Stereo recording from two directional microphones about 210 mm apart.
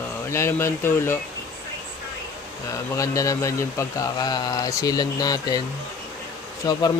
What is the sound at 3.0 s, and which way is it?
A man's voice, 15° left (ahead or behind).